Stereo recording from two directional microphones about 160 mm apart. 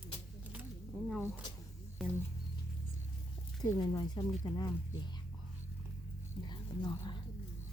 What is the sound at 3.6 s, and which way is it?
Speech, 25° left (ahead or behind).